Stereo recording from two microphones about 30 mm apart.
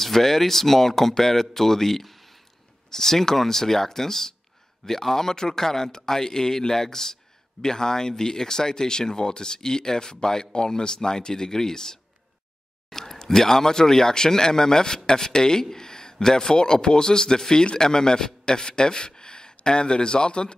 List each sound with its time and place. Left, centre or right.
0.0 s speech: centre
2.9 s a man's voice: centre; by 20.5 s left